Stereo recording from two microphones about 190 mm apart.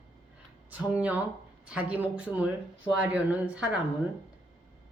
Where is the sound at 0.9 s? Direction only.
5° right (ahead or behind).